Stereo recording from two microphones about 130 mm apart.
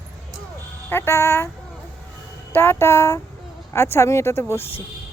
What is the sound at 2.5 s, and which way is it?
Speech, 15° left (ahead or behind).